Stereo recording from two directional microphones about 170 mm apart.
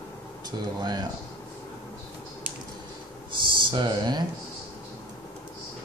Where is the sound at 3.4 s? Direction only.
30° right (ahead or behind).